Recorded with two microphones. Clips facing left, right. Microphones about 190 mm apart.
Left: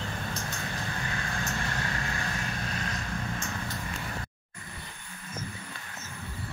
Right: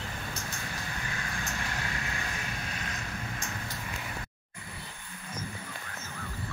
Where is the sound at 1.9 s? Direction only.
40° left (ahead or behind).